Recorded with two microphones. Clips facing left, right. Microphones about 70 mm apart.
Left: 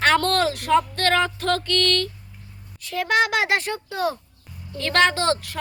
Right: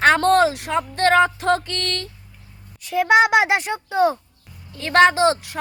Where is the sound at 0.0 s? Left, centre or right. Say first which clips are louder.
Right 4 dB; centre.